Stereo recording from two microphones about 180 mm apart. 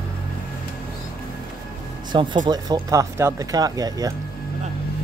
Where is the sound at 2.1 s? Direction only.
25° right (ahead or behind).